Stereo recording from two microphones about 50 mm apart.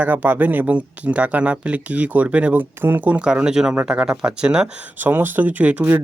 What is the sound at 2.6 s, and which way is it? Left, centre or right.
Speech, right.